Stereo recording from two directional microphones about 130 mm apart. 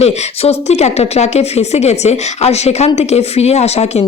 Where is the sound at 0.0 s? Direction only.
55° left (ahead or behind).